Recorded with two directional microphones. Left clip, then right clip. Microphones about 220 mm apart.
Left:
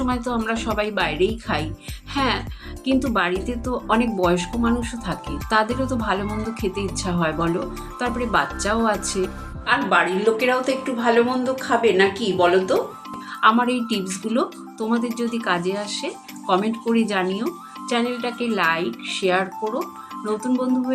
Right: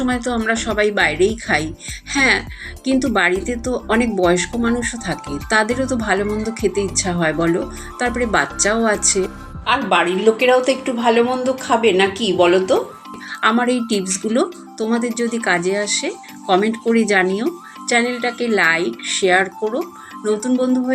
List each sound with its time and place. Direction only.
0.0 s speech: 5° right (ahead or behind)
2.0 s music: 10° right (ahead or behind)
2.8 s speech: 5° right (ahead or behind)
10.3 s speech: 15° right (ahead or behind)